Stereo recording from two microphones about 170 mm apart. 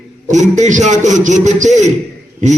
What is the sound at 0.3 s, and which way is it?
A man's voice, 45° right (ahead or behind).